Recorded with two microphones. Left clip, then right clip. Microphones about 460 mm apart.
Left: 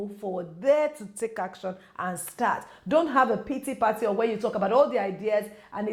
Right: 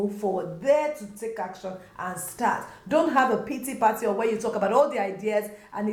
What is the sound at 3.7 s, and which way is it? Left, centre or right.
Speech, left.